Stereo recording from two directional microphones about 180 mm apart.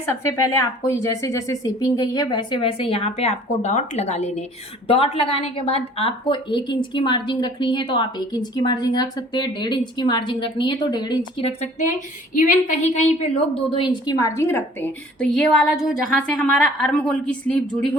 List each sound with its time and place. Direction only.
0.0 s a woman's voice: 15° left (ahead or behind); by 13.2 s 40° left (ahead or behind)
13.7 s a woman's voice: 25° left (ahead or behind); by 17.6 s 5° left (ahead or behind)